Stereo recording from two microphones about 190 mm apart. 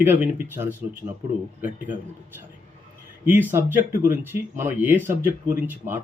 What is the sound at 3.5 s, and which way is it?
Speech, 10° right (ahead or behind).